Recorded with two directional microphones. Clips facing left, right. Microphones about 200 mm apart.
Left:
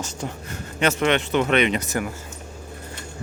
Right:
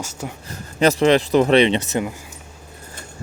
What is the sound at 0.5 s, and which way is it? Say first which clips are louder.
Speech: right 6 dB; 35° right (ahead or behind).